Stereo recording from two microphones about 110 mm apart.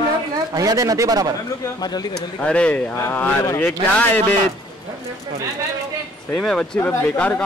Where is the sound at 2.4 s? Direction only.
10° left (ahead or behind).